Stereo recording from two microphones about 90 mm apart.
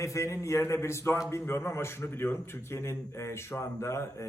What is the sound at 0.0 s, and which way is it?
A man's voice, 35° left (ahead or behind).